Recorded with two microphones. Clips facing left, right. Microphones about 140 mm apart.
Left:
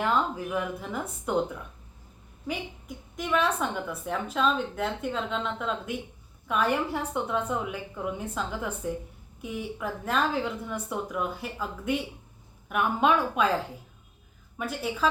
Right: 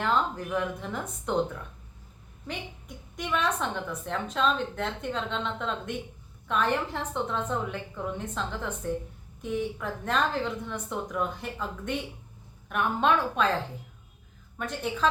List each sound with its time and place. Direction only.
0.0 s a woman's voice: 10° left (ahead or behind)
2.5 s a woman's voice: centre (ahead or behind)
14.6 s a woman's voice: 5° left (ahead or behind)